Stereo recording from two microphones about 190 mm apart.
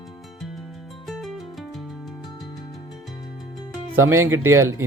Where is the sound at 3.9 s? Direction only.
15° right (ahead or behind).